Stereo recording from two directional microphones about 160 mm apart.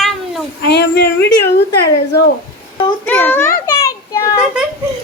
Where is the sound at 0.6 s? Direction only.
90° left.